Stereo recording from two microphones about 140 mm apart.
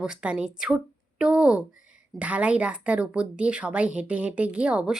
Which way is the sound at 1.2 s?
5° right (ahead or behind).